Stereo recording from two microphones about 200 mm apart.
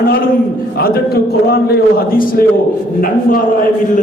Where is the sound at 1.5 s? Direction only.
50° left (ahead or behind).